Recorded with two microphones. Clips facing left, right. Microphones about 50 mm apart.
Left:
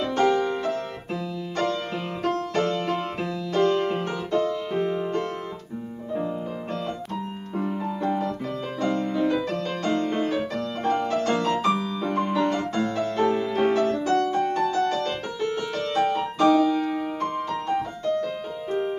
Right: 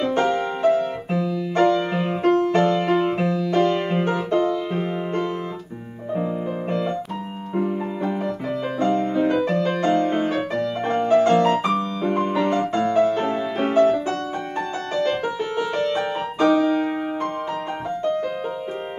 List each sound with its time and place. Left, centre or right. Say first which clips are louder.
0.0 s music: right 1 dB; right
8.7 s music: right 4 dB; right